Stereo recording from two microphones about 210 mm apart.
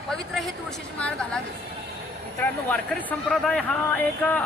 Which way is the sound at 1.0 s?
5° left (ahead or behind).